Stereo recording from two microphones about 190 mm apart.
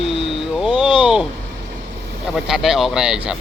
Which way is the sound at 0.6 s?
5° right (ahead or behind).